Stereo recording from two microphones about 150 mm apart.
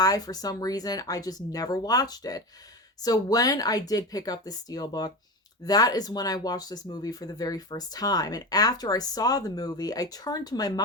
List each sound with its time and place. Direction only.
0.0 s speech: 25° left (ahead or behind)